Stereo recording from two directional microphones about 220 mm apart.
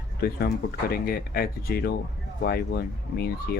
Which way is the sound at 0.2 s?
45° left (ahead or behind).